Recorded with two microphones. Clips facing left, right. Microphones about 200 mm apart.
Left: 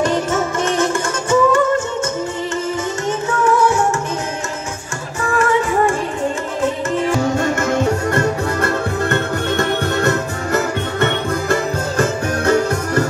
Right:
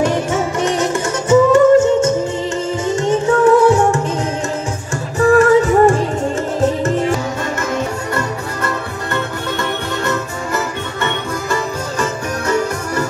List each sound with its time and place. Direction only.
0.0 s music: 10° right (ahead or behind)
3.1 s music: 35° right (ahead or behind)
5.3 s music: 40° right (ahead or behind)
8.1 s music: 55° left (ahead or behind)